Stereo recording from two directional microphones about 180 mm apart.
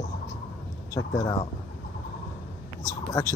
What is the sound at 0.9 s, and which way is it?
Speech, 20° left (ahead or behind).